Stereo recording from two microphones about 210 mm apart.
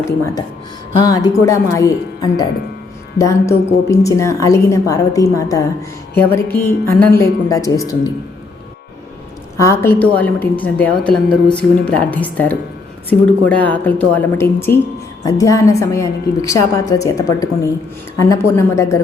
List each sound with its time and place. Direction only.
0.9 s a woman's voice: 20° left (ahead or behind)
9.6 s a woman's voice: 15° left (ahead or behind)